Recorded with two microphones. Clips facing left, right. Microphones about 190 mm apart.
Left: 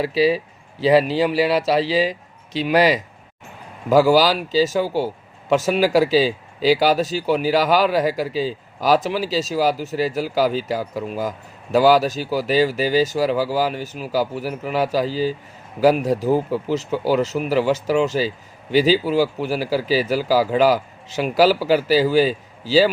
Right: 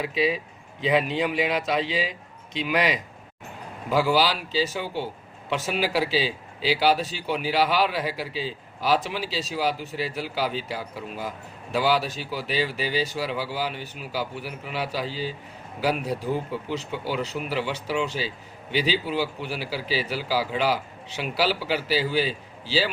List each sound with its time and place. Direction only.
0.0 s speech: 35° left (ahead or behind)